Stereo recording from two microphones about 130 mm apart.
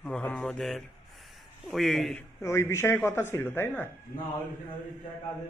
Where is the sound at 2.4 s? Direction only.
20° left (ahead or behind).